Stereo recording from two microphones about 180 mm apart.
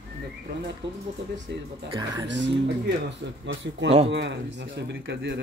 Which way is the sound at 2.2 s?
90° right.